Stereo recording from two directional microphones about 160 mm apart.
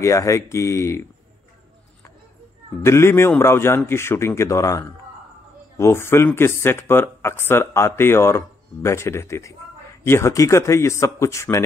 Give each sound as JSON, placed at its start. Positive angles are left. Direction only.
{"t": 0.0, "sound": "speech", "side_deg": 20}
{"t": 2.8, "sound": "speech", "side_deg": 15}